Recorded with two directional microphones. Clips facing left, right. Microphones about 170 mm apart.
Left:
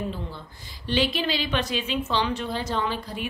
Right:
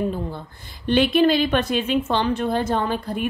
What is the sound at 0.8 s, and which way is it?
A woman's voice, 55° right (ahead or behind).